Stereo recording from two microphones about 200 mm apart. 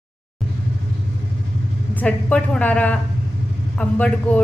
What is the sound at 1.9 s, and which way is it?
A woman's voice, 5° left (ahead or behind).